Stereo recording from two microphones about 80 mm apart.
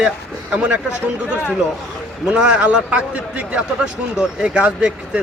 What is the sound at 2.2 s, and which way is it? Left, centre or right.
A man's voice, centre.